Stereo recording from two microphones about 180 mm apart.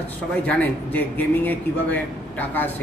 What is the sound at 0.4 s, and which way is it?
Speech, 10° left (ahead or behind).